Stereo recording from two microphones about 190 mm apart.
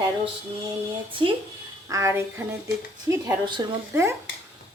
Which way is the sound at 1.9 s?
15° right (ahead or behind).